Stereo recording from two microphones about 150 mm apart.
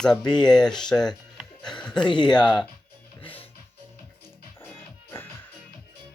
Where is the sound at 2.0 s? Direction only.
30° left (ahead or behind).